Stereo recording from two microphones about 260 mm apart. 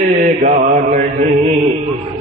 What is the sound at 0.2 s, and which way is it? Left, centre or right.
Mantra, right.